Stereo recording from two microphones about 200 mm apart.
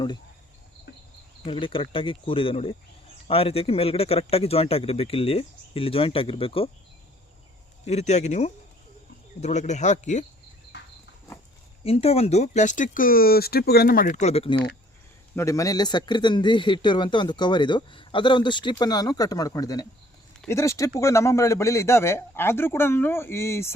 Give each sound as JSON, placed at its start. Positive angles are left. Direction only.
{"t": 1.5, "sound": "speech", "side_deg": 25}
{"t": 7.9, "sound": "speech", "side_deg": 35}
{"t": 11.8, "sound": "speech", "side_deg": 30}
{"t": 15.4, "sound": "a man's voice", "side_deg": 15}